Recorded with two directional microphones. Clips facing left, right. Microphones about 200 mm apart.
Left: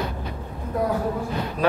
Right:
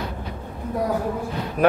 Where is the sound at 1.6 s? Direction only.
50° right (ahead or behind).